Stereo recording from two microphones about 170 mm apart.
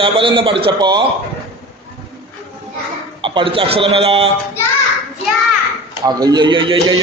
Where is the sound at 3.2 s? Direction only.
30° right (ahead or behind).